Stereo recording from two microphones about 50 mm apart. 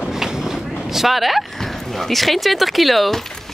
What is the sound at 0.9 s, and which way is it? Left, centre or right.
Speech, centre.